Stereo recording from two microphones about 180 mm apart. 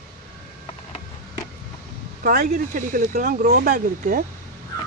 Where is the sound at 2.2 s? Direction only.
55° right (ahead or behind).